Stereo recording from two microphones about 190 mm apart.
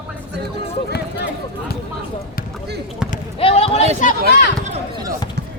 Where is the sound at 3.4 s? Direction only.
30° left (ahead or behind).